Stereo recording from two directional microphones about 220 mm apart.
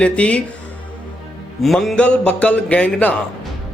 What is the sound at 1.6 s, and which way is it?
Speech, centre (ahead or behind).